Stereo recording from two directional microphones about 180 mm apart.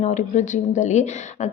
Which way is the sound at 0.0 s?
40° left (ahead or behind).